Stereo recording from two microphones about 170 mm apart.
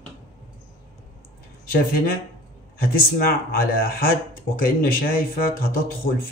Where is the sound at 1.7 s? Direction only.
60° left (ahead or behind).